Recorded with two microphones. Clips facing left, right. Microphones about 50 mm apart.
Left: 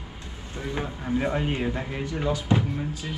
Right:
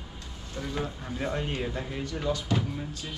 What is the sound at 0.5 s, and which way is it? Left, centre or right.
Speech, left.